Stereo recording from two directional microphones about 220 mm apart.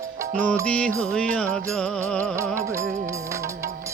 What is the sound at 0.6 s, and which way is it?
Music, 5° left (ahead or behind).